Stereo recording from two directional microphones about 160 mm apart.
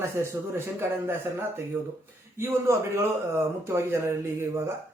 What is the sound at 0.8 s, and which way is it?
A man's voice, 15° right (ahead or behind).